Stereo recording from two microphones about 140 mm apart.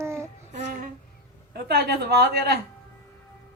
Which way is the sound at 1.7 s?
90° right.